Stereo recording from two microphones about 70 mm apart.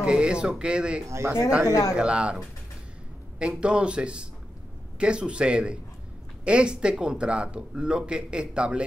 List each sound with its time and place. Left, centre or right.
0.0 s speech: centre
1.0 s speech: right
1.7 s speech: left
2.0 s speech: centre